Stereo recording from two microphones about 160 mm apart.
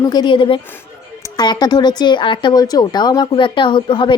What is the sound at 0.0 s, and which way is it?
A woman's voice, 25° left (ahead or behind).